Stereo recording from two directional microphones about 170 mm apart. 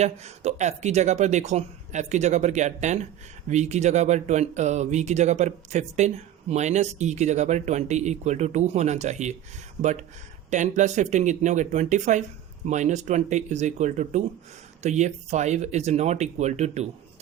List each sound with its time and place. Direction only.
0.0 s speech: 40° right (ahead or behind)
10.5 s speech: 45° right (ahead or behind)